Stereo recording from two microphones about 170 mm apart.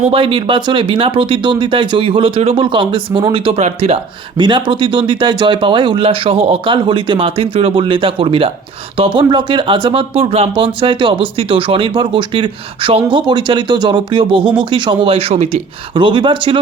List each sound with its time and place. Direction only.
0.1 s speech: 30° right (ahead or behind)